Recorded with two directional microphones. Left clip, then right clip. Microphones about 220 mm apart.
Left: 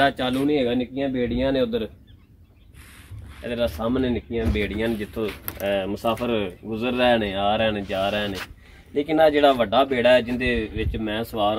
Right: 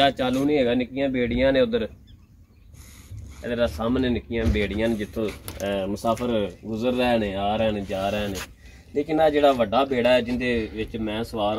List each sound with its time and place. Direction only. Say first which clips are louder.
0.0 s speech: even; 15° left (ahead or behind)
3.4 s a man's voice: even; 5° left (ahead or behind)
3.9 s speech: even; 20° right (ahead or behind)
4.8 s speech: right 1 dB; 45° right (ahead or behind)
5.4 s speech: left 2 dB; 30° right (ahead or behind)
6.2 s a man's voice: even; 15° right (ahead or behind); by 11.2 s 10° left (ahead or behind)